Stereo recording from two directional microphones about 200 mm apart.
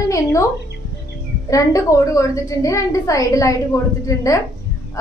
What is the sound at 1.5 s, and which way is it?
A woman's voice, 15° left (ahead or behind).